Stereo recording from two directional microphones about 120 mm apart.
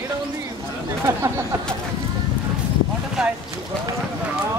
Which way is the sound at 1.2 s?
25° right (ahead or behind).